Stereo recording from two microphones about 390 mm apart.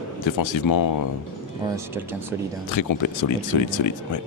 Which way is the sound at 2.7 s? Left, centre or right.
Left.